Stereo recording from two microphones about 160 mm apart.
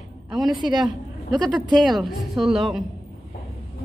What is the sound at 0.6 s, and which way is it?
Speech, 30° right (ahead or behind).